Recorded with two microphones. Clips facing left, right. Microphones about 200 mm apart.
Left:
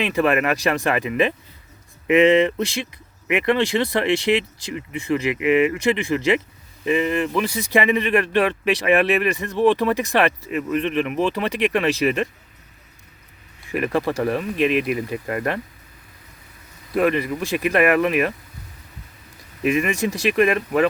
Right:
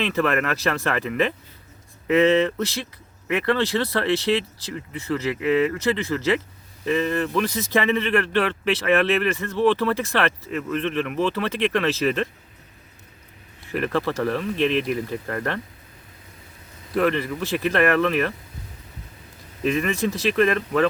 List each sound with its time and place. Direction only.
0.0 s speech: 15° left (ahead or behind)
13.7 s speech: 15° left (ahead or behind)
16.9 s speech: 15° left (ahead or behind)
19.6 s speech: 10° left (ahead or behind)